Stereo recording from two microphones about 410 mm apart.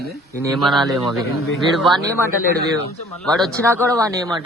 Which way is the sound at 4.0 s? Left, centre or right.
Centre.